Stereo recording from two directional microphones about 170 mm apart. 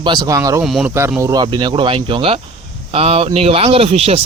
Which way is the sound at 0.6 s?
Centre (ahead or behind).